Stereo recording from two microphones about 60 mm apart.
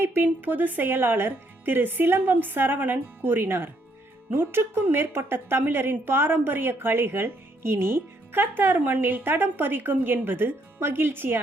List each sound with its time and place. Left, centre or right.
0.0 s a woman's voice: right